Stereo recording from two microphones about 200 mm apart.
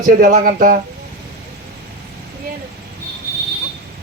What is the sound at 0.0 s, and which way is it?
Speech, 45° right (ahead or behind).